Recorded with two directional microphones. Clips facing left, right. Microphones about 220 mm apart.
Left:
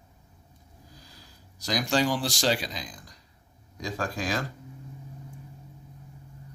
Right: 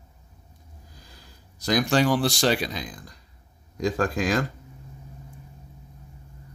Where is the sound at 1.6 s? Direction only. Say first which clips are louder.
Right 5 dB; 55° right (ahead or behind).